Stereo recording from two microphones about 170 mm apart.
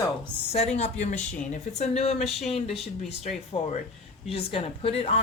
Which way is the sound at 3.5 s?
35° left (ahead or behind).